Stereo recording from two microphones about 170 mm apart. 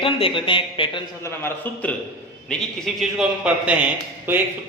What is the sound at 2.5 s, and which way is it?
A man's voice, centre (ahead or behind).